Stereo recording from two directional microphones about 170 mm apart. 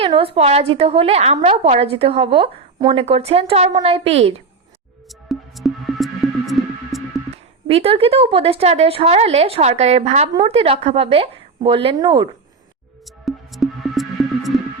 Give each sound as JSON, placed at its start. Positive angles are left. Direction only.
{"t": 0.0, "sound": "a woman's voice", "side_deg": -35}
{"t": 5.0, "sound": "music", "side_deg": 0}
{"t": 7.7, "sound": "a woman's voice", "side_deg": -35}
{"t": 13.1, "sound": "music", "side_deg": 0}